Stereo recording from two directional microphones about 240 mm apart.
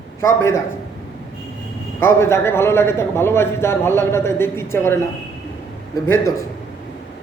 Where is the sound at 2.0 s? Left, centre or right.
Centre.